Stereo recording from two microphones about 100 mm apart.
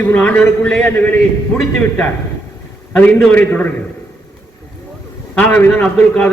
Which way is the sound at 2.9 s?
10° left (ahead or behind).